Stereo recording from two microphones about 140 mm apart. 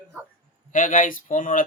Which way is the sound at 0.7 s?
70° left (ahead or behind).